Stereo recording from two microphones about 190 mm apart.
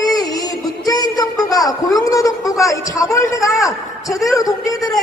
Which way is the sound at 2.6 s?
15° left (ahead or behind).